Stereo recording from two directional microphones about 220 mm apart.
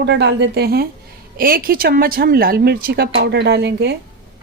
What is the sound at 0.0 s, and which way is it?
Speech, 50° right (ahead or behind).